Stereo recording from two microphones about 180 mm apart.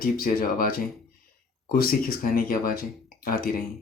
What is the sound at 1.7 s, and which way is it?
Speech, 55° left (ahead or behind).